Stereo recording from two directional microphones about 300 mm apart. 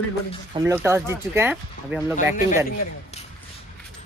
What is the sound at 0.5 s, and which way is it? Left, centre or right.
Speech, centre.